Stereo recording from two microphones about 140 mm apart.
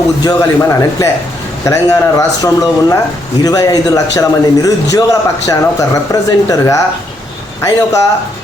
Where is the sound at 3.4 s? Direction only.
25° left (ahead or behind).